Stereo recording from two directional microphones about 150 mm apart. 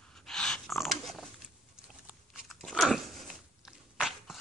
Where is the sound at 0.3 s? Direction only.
5° left (ahead or behind).